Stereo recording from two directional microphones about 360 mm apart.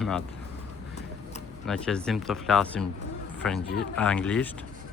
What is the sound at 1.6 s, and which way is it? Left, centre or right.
Speech, centre.